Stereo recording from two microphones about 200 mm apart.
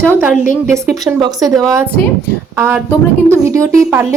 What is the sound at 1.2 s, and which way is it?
Speech, 20° right (ahead or behind).